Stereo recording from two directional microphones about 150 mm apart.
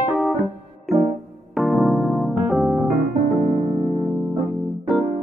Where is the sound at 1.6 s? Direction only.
Centre (ahead or behind).